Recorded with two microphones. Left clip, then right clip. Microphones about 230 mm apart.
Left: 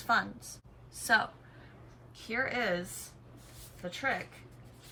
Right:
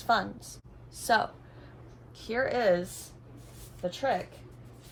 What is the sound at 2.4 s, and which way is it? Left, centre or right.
Speech, centre.